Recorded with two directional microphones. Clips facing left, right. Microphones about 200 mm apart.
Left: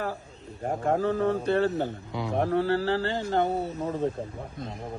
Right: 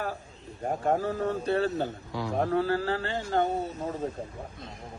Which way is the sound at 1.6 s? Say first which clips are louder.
Left 2 dB; 20° left (ahead or behind).